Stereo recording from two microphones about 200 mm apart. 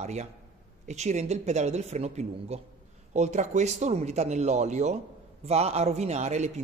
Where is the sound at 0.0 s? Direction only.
35° right (ahead or behind).